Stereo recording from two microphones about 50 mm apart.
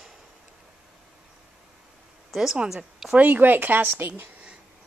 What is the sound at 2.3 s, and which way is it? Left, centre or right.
Speech, centre.